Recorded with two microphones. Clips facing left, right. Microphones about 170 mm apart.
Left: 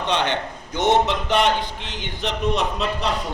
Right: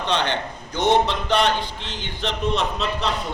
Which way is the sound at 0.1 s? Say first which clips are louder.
Left 1 dB; 20° left (ahead or behind).